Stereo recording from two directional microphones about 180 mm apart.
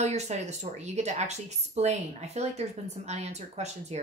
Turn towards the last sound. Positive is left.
turn(degrees=-35)  # may be behind; listen again after turning